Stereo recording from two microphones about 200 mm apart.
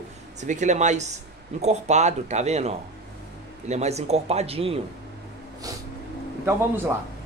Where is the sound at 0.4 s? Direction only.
35° right (ahead or behind).